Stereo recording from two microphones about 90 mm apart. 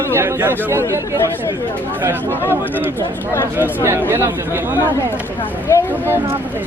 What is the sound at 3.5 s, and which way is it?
Speech, 30° right (ahead or behind).